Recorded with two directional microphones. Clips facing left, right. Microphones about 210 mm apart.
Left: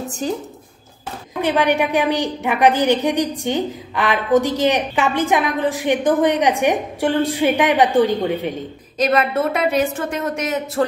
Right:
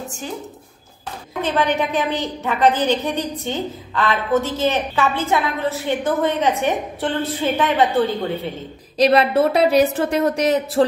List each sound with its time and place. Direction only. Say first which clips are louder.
1.4 s a woman's voice: left 3 dB; 15° left (ahead or behind)
8.9 s a woman's voice: right 3 dB; 35° right (ahead or behind)